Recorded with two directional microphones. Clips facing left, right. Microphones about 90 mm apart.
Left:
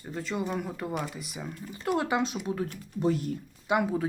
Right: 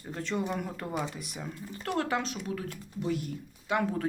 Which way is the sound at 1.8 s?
15° left (ahead or behind).